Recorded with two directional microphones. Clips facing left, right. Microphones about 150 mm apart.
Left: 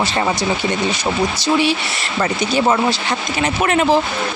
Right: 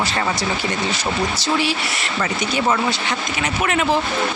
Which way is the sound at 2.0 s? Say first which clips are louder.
Left 3 dB; 35° left (ahead or behind).